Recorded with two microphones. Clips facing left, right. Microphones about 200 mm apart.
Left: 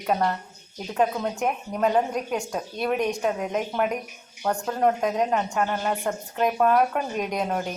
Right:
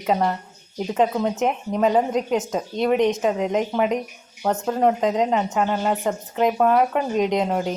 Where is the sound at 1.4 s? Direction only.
20° right (ahead or behind).